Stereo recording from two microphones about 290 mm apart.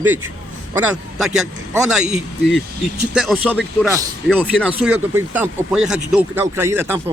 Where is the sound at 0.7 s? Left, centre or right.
Centre.